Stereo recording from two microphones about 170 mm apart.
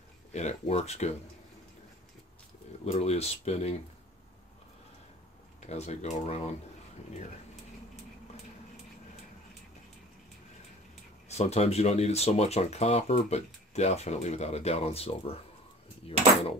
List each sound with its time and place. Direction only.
0.3 s speech: 40° left (ahead or behind)
2.8 s speech: 35° left (ahead or behind)
5.6 s speech: 40° left (ahead or behind)
11.2 s speech: 40° left (ahead or behind)